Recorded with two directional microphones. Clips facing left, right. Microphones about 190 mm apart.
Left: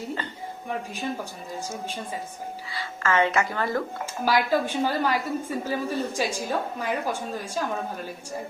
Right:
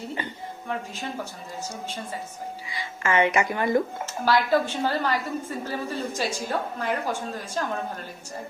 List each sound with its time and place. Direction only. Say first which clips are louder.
2.6 s speech: even; 15° right (ahead or behind)
4.0 s a woman's voice: right 1 dB; 10° left (ahead or behind)